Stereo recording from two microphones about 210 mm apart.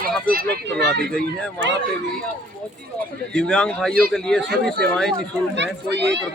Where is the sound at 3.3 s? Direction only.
5° left (ahead or behind).